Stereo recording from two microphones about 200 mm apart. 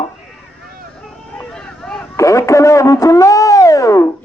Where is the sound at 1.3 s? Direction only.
5° left (ahead or behind).